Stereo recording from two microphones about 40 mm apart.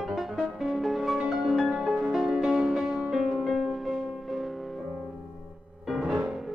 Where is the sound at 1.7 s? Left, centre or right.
Centre.